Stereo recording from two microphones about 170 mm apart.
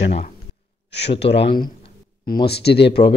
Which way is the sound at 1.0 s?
90° left.